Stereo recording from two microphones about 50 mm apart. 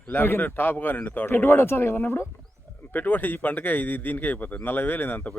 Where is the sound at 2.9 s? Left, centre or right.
Left.